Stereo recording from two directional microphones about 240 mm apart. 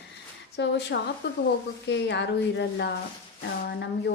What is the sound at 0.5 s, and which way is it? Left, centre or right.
A woman's voice, left.